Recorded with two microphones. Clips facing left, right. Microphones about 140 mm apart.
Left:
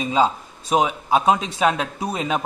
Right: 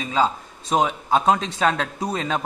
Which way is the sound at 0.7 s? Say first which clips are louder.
Left 1 dB; 5° left (ahead or behind).